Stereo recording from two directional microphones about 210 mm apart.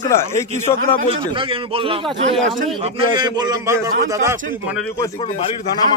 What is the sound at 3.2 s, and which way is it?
A man's voice, 20° right (ahead or behind).